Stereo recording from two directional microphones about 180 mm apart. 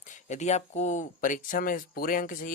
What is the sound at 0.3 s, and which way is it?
Speech, 40° left (ahead or behind).